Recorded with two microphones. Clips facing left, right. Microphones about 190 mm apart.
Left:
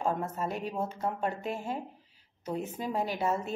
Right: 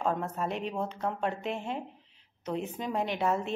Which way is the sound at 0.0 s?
5° left (ahead or behind).